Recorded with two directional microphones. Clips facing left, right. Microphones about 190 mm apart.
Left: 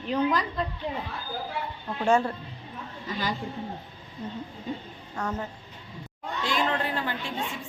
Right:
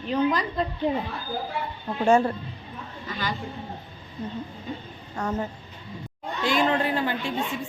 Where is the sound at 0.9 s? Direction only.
20° right (ahead or behind).